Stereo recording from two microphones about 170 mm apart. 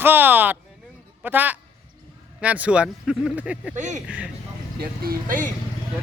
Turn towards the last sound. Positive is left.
turn(degrees=-55)  # may be behind; listen again after turning